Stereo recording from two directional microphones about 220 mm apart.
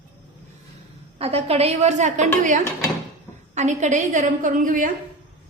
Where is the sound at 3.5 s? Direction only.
30° right (ahead or behind).